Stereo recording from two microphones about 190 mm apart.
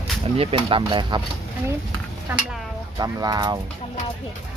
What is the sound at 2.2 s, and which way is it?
Dishes, 10° right (ahead or behind).